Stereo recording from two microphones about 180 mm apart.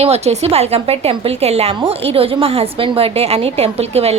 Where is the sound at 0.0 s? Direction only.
35° right (ahead or behind).